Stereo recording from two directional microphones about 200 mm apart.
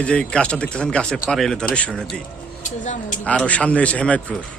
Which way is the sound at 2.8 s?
40° left (ahead or behind).